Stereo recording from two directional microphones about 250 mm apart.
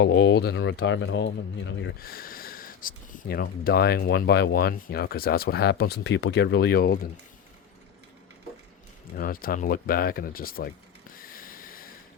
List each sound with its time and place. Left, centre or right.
0.0 s speech: left
9.1 s speech: left
11.1 s a sound: left